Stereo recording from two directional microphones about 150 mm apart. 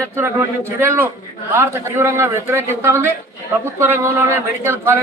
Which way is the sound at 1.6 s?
15° right (ahead or behind).